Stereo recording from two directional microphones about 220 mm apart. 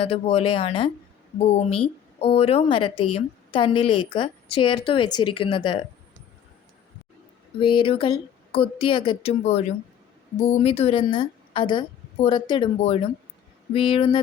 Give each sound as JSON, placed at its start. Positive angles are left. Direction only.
{"t": 0.0, "sound": "speech", "side_deg": 25}
{"t": 7.6, "sound": "speech", "side_deg": 25}